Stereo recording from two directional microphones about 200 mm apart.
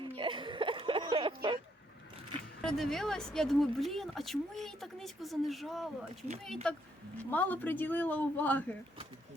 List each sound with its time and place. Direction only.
0.2 s music: 25° right (ahead or behind)
2.6 s a woman's voice: 5° left (ahead or behind)